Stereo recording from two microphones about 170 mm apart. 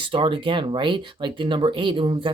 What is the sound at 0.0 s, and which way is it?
Speech, 30° right (ahead or behind).